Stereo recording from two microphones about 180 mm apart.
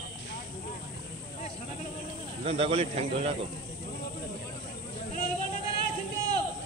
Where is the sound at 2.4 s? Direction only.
35° right (ahead or behind).